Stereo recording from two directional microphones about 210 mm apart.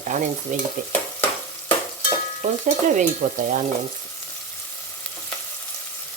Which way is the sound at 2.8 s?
40° right (ahead or behind).